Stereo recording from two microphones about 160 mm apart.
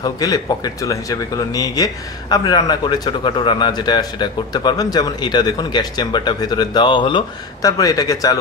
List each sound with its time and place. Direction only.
0.0 s speech: 25° left (ahead or behind)